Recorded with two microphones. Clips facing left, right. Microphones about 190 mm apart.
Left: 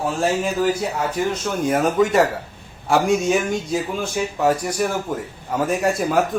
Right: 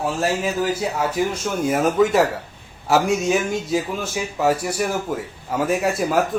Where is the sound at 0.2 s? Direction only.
5° right (ahead or behind).